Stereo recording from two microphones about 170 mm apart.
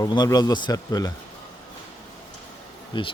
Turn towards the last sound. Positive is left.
turn(degrees=30)  # may be behind; listen again after turning